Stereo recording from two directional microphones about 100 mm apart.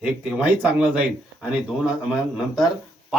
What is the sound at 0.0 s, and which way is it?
Speech, 10° right (ahead or behind).